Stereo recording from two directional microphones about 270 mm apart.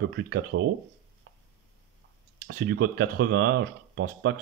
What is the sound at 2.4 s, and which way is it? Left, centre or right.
Speech, right.